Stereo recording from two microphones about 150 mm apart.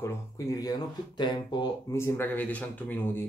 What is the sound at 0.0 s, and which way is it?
Speech, 25° left (ahead or behind).